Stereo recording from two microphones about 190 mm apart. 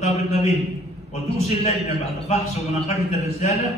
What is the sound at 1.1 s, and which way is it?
A man's voice, 35° left (ahead or behind).